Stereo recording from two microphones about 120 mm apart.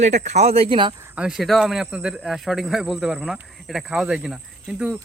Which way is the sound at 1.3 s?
Centre (ahead or behind).